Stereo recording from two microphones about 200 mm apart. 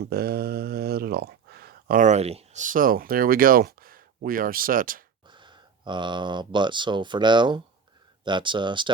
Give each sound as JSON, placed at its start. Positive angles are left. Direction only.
{"t": 0.0, "sound": "speech", "side_deg": -50}
{"t": 5.3, "sound": "speech", "side_deg": -25}